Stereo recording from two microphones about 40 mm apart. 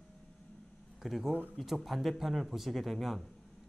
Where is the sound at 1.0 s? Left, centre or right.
Centre.